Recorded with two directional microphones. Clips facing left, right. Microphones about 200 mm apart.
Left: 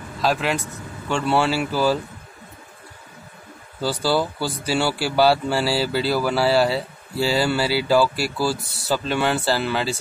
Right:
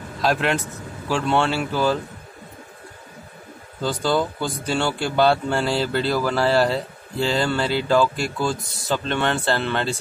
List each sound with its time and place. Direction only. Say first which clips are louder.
0.2 s speech: right 1 dB; centre (ahead or behind)
3.8 s speech: even; 5° left (ahead or behind)